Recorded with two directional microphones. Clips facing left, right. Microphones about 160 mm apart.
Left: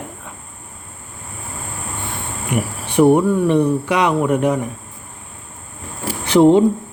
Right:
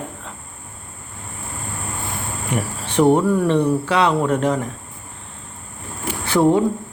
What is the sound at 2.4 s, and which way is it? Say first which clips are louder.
Cricket: left 3 dB; 10° left (ahead or behind).